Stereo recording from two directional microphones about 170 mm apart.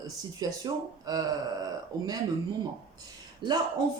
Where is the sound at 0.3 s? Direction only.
20° right (ahead or behind).